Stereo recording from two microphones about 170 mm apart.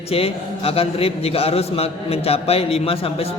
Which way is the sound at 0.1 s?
35° left (ahead or behind).